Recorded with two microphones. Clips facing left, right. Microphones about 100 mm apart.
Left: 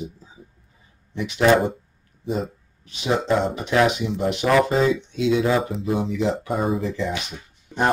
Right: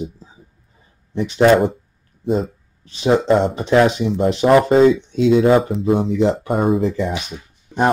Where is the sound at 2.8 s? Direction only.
35° right (ahead or behind).